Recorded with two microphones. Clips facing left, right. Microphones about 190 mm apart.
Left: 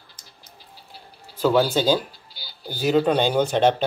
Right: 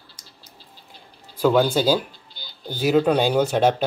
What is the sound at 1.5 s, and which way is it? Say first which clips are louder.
Speech: right 1 dB; 10° left (ahead or behind).